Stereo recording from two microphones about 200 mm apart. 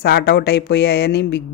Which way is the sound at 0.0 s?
55° left (ahead or behind).